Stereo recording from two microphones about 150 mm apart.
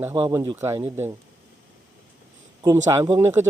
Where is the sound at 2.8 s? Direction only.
20° right (ahead or behind).